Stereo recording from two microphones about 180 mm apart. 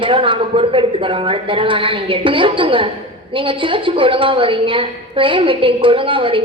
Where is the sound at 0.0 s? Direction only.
30° right (ahead or behind).